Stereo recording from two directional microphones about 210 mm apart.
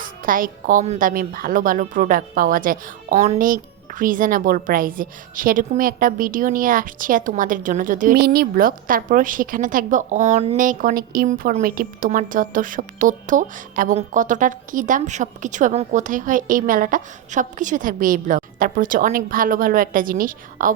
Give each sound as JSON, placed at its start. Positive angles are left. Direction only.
{"t": 0.0, "sound": "a woman's voice", "side_deg": -40}